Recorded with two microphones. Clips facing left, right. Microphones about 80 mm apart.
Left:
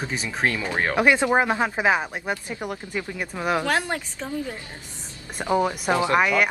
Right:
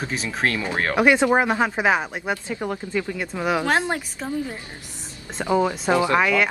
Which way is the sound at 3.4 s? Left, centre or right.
Centre.